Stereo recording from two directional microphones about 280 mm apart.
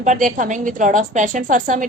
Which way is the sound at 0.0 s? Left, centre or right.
Right.